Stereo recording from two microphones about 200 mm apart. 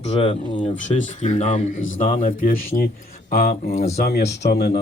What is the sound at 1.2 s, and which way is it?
Speech, 35° left (ahead or behind).